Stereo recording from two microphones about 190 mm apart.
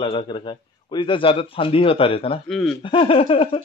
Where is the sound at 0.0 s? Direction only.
25° left (ahead or behind).